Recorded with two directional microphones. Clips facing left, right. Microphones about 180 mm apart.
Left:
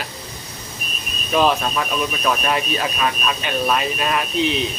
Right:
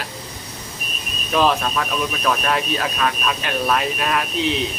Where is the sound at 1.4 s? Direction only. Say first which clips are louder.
Left 1 dB; 5° left (ahead or behind).